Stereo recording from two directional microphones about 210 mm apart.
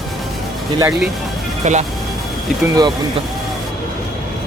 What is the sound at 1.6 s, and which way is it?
Speech, 35° right (ahead or behind).